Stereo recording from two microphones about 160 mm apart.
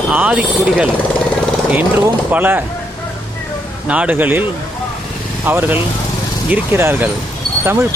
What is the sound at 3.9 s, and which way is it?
Speech, 10° right (ahead or behind).